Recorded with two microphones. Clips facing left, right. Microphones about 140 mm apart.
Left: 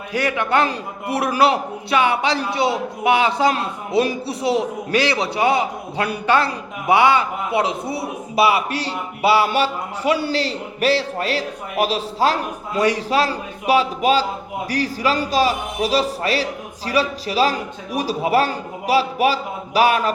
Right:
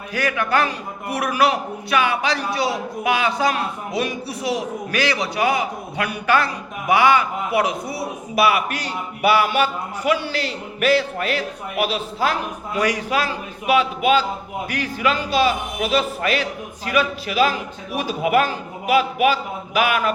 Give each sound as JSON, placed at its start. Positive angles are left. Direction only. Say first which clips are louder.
{"t": 0.1, "sound": "a man's voice", "louder": "left 2 dB", "side_deg": 25}